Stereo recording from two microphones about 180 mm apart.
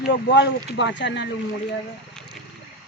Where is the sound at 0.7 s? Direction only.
85° left.